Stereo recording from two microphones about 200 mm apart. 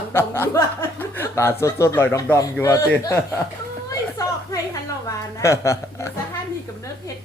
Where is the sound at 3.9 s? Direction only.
15° left (ahead or behind).